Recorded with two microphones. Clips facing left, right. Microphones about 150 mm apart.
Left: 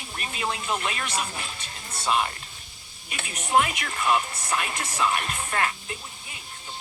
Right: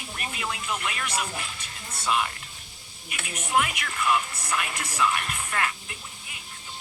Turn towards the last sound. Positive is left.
turn(degrees=30)  # may be behind; listen again after turning